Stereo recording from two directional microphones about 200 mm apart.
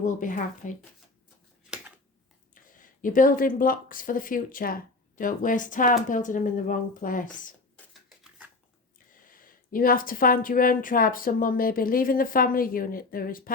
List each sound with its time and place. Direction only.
0.0 s speech: 40° left (ahead or behind)
2.6 s speech: 40° left (ahead or behind)
9.1 s speech: 45° left (ahead or behind)